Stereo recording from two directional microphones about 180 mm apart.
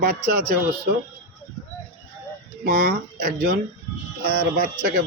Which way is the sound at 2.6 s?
60° right (ahead or behind).